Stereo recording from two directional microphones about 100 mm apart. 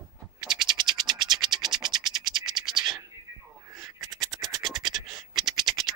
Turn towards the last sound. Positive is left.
turn(degrees=0)  # may be behind; listen again after turning